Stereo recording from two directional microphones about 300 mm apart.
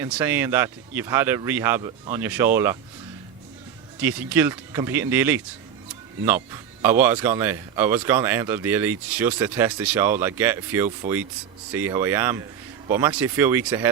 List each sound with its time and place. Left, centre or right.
0.0 s speech: centre
4.0 s speech: centre